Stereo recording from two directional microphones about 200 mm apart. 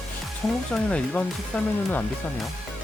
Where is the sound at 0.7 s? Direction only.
5° left (ahead or behind).